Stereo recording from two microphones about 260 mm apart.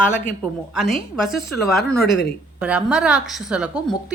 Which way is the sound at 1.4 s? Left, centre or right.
Left.